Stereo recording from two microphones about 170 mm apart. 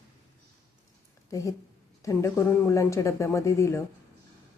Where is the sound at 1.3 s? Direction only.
20° left (ahead or behind).